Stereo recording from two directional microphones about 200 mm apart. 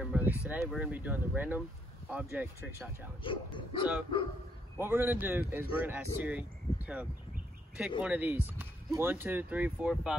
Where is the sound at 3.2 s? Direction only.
25° left (ahead or behind).